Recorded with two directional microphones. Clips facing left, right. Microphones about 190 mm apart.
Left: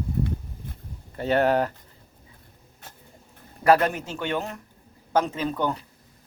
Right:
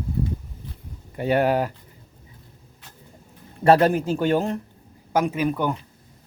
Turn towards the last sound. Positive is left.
turn(degrees=-15)  # may be behind; listen again after turning